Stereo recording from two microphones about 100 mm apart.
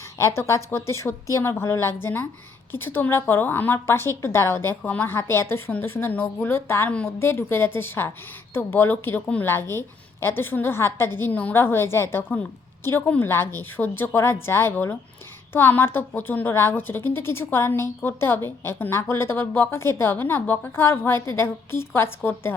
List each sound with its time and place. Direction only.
0.2 s a woman's voice: 30° left (ahead or behind)